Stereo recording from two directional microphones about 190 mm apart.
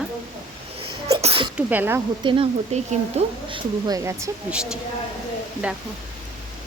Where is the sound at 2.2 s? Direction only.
25° right (ahead or behind).